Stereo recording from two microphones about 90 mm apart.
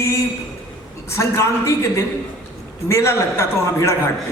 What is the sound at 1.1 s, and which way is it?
Speech, 30° left (ahead or behind).